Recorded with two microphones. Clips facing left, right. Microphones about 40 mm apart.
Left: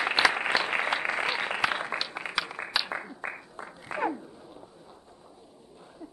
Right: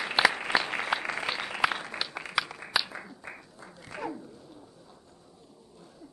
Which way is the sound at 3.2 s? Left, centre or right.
Left.